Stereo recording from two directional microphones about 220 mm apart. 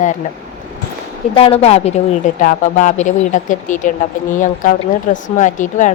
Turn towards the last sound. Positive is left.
turn(degrees=35)  # may be behind; listen again after turning